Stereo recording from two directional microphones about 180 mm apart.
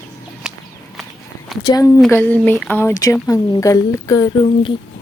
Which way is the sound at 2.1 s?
10° left (ahead or behind).